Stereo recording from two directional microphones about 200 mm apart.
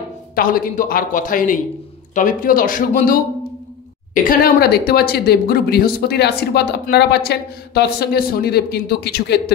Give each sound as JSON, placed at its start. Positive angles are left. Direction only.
{"t": 0.4, "sound": "speech", "side_deg": 45}